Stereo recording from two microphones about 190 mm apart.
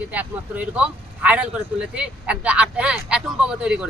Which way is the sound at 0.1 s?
10° right (ahead or behind).